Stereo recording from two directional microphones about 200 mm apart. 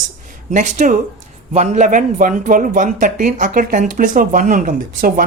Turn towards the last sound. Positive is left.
turn(degrees=-45)  # may be behind; listen again after turning